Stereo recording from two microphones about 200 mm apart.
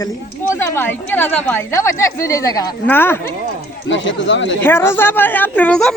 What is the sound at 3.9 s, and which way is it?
Speech, 65° left (ahead or behind).